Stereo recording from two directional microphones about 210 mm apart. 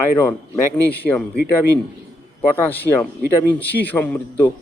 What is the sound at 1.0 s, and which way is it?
Speech, 5° left (ahead or behind).